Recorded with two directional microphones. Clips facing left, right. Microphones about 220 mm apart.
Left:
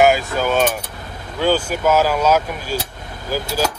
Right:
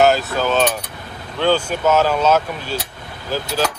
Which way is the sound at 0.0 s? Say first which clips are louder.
Even; 10° left (ahead or behind).